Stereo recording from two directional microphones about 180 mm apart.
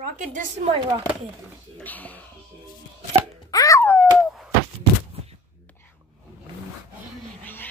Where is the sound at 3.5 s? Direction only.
20° left (ahead or behind); by 4.5 s 5° left (ahead or behind).